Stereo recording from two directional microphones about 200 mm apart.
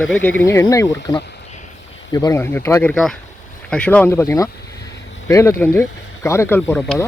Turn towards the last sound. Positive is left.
turn(degrees=10)  # may be behind; listen again after turning